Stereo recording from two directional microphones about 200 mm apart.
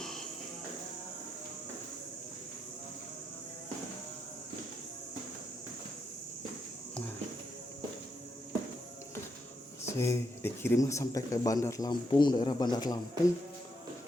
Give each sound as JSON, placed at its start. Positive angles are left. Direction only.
{"t": 10.0, "sound": "speech", "side_deg": 10}